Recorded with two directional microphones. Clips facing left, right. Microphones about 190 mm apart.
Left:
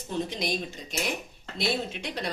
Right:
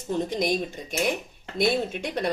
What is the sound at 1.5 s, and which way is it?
Speech, 50° right (ahead or behind).